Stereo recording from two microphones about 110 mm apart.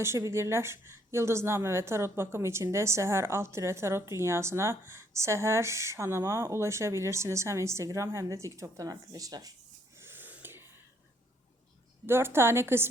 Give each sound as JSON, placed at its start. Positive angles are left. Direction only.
{"t": 0.0, "sound": "a woman's voice", "side_deg": -25}
{"t": 10.0, "sound": "wheeze", "side_deg": -20}
{"t": 12.0, "sound": "a woman's voice", "side_deg": -20}